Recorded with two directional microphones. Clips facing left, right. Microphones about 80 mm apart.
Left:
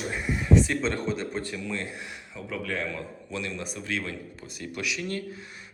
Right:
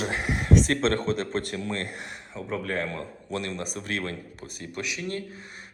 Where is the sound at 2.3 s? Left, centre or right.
Right.